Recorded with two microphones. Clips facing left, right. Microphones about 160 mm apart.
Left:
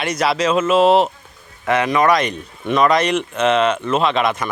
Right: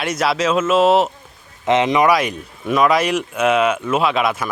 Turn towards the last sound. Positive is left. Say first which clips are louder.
# even
turn(degrees=-5)  # may be behind; listen again after turning